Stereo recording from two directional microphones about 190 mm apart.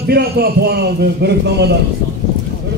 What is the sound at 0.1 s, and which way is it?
A man's voice, 55° right (ahead or behind).